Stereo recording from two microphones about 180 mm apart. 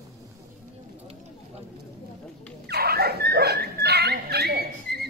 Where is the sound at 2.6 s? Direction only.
65° right (ahead or behind).